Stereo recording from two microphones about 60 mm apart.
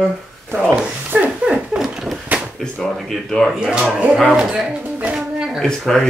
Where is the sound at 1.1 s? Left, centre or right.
Right.